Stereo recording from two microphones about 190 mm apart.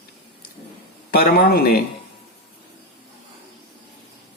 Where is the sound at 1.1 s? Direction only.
50° left (ahead or behind).